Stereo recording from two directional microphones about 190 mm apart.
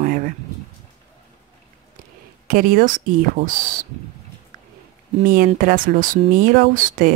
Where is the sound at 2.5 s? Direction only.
45° right (ahead or behind).